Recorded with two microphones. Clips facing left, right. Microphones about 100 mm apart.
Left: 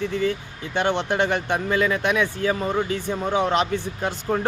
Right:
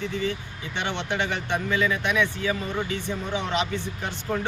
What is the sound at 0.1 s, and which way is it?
Speech, 50° left (ahead or behind).